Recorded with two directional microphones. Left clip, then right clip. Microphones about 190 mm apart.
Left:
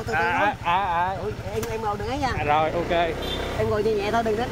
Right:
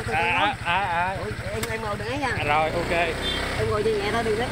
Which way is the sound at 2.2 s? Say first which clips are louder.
Left 1 dB; 35° left (ahead or behind).